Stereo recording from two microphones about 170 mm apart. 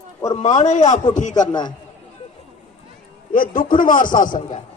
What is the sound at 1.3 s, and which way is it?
Speech, 25° left (ahead or behind).